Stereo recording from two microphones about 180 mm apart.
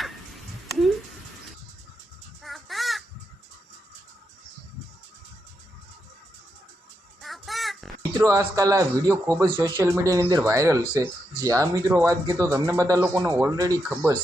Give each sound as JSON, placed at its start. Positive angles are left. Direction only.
{"t": 0.0, "sound": "a sound", "side_deg": 0}
{"t": 2.4, "sound": "crow", "side_deg": 0}
{"t": 7.2, "sound": "child singing", "side_deg": 0}
{"t": 8.2, "sound": "a man's voice", "side_deg": -20}